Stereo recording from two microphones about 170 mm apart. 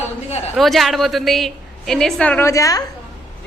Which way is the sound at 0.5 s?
Centre (ahead or behind).